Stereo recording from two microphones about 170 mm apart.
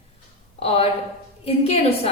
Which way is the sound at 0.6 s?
35° left (ahead or behind).